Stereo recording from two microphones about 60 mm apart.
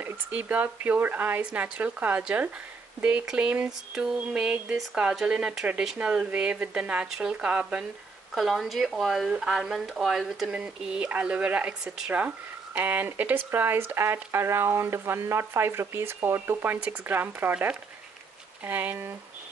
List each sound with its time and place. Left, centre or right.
0.3 s speech: right
8.4 s speech: centre
10.5 s speech: centre